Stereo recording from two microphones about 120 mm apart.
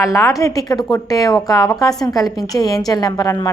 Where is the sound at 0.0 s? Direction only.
25° left (ahead or behind).